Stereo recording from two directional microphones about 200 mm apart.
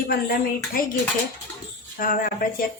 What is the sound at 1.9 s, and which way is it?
Speech, 45° left (ahead or behind).